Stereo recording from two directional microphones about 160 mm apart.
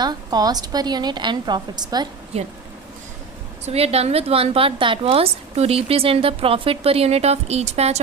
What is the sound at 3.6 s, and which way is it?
A woman's voice, 40° right (ahead or behind).